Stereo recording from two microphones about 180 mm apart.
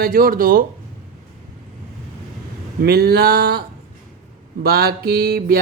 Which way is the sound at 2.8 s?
60° right (ahead or behind).